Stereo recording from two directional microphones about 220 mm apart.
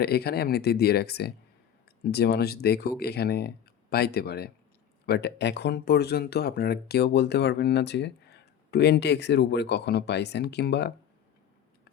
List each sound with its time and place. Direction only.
0.0 s speech: 45° left (ahead or behind)